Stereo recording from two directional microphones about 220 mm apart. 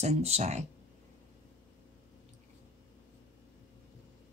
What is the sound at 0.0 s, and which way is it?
Speech, 30° right (ahead or behind).